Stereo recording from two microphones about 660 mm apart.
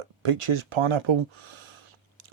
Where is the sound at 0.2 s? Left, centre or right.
Right.